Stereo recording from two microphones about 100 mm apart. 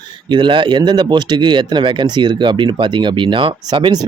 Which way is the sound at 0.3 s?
55° right (ahead or behind).